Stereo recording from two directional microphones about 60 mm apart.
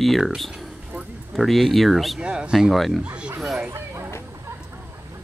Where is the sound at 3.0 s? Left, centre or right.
Centre.